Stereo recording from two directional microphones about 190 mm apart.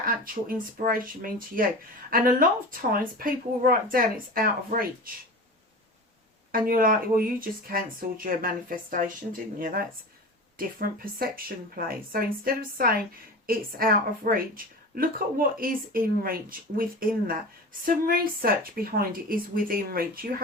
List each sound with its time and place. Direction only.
0.0 s a woman's voice: 50° right (ahead or behind)
6.5 s a woman's voice: 50° right (ahead or behind)